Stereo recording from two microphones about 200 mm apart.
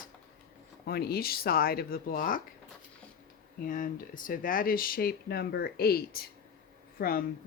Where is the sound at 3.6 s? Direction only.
45° left (ahead or behind).